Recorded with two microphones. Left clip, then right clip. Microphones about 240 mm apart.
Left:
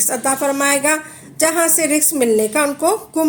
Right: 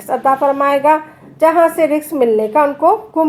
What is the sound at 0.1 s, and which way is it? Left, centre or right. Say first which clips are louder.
A woman's voice: right 8 dB; left.